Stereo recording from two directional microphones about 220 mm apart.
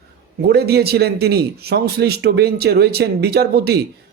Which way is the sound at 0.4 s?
45° right (ahead or behind).